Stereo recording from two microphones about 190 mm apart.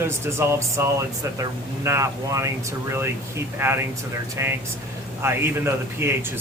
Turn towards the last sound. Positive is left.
turn(degrees=-15)  # may be behind; listen again after turning